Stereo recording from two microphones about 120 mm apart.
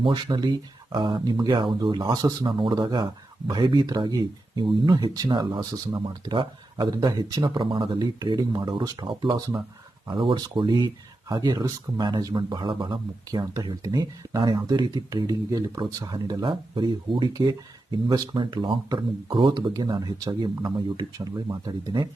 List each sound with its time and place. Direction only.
0.0 s speech: 35° right (ahead or behind)